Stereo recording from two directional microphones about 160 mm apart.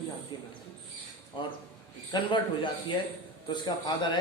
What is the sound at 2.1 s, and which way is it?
Speech, 30° left (ahead or behind).